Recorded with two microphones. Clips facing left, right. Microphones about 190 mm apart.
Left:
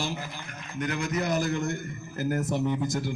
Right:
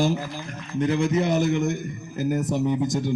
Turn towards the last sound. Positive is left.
turn(degrees=-20)  # may be behind; listen again after turning